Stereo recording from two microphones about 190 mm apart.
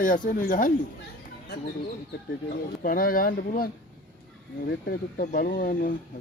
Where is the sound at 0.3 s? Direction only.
45° left (ahead or behind).